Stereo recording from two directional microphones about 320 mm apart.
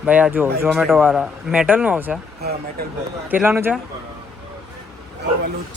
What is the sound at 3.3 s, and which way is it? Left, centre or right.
Speech, centre.